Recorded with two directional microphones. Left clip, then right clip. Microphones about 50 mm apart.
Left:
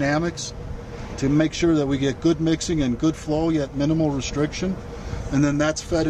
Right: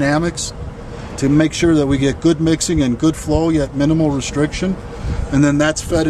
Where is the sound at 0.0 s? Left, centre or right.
Right.